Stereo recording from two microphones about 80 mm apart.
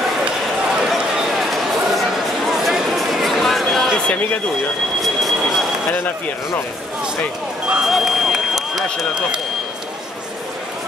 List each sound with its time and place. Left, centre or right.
0.2 s a sound: centre
5.0 s train: centre
5.9 s speech: centre
7.7 s run: centre